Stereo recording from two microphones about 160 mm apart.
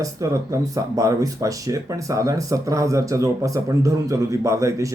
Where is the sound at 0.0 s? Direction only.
20° right (ahead or behind).